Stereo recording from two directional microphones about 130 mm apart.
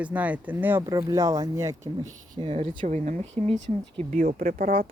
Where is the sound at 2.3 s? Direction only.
45° right (ahead or behind).